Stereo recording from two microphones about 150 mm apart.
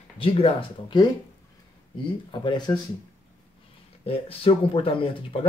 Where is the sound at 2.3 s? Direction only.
30° left (ahead or behind).